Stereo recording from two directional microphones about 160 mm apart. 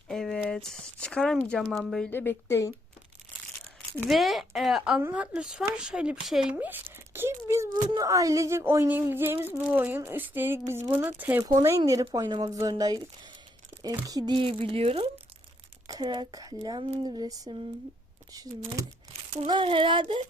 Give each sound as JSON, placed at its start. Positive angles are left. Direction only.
{"t": 0.1, "sound": "speech", "side_deg": 5}
{"t": 2.0, "sound": "a woman's voice", "side_deg": 15}
{"t": 4.1, "sound": "speech", "side_deg": 0}
{"t": 15.9, "sound": "speech", "side_deg": -25}